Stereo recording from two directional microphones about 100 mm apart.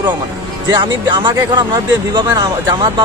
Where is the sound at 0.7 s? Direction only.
50° right (ahead or behind).